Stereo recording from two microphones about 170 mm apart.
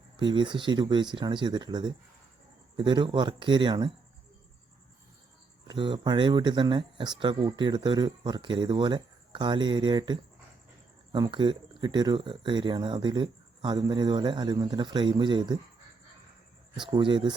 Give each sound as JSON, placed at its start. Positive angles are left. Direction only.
{"t": 0.2, "sound": "speech", "side_deg": -25}
{"t": 5.6, "sound": "speech", "side_deg": -30}
{"t": 16.8, "sound": "speech", "side_deg": -30}